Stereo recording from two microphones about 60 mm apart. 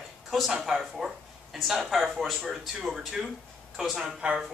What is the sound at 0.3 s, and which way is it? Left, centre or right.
Speech, centre.